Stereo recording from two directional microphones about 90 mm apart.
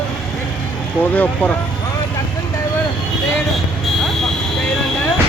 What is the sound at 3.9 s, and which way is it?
Vehicle, 5° left (ahead or behind).